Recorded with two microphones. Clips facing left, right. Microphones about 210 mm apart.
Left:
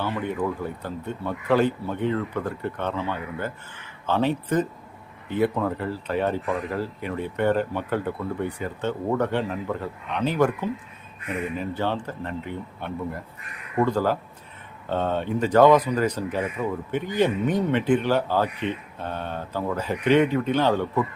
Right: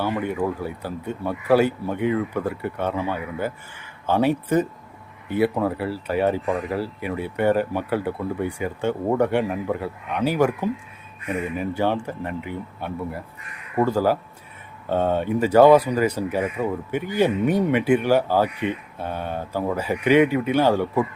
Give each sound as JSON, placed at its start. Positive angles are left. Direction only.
{"t": 0.0, "sound": "speech", "side_deg": -10}
{"t": 16.6, "sound": "speech", "side_deg": -40}
{"t": 16.9, "sound": "speech", "side_deg": -10}